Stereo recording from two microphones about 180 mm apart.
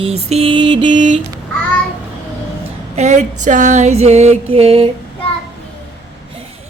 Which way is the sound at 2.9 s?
40° right (ahead or behind).